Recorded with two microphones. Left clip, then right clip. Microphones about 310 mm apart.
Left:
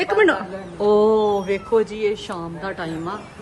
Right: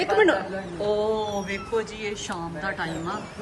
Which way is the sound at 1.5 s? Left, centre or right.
Centre.